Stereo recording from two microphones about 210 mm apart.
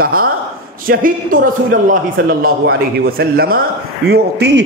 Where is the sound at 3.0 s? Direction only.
45° right (ahead or behind).